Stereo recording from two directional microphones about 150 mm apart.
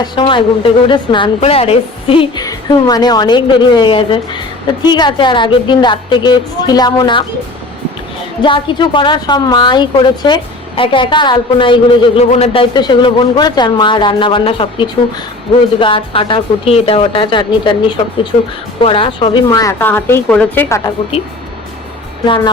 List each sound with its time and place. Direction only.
0.0 s a woman's voice: 35° left (ahead or behind)
2.4 s a woman's voice: 25° left (ahead or behind)
8.4 s a woman's voice: 30° left (ahead or behind)
12.7 s a woman's voice: 30° left (ahead or behind)
19.5 s a woman's voice: 20° left (ahead or behind)